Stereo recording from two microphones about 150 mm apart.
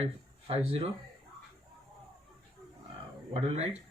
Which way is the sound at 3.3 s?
40° right (ahead or behind).